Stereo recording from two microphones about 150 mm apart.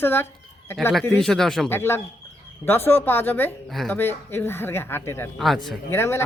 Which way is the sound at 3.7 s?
Centre (ahead or behind).